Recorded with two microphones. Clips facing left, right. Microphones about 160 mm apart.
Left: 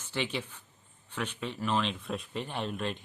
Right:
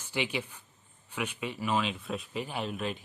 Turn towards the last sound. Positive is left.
turn(degrees=-5)  # may be behind; listen again after turning